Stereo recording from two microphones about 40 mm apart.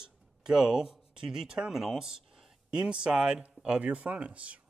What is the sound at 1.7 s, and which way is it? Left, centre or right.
Speech, centre.